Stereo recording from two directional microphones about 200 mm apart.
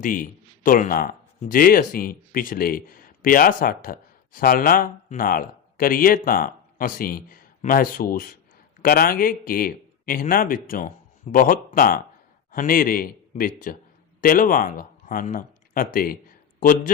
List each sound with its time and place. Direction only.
0.0 s speech: 45° left (ahead or behind)